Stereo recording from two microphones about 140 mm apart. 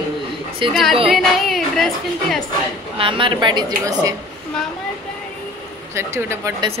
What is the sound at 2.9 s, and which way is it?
A woman's voice, 40° right (ahead or behind).